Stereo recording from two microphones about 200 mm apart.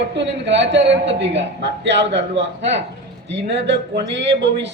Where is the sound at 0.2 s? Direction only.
65° right (ahead or behind).